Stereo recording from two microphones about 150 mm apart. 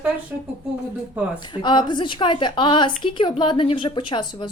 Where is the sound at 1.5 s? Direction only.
30° left (ahead or behind).